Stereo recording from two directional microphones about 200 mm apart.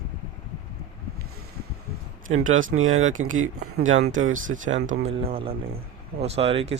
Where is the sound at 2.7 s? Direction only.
80° right.